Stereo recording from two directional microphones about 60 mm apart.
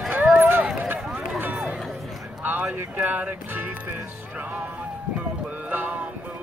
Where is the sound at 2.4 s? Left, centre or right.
Right.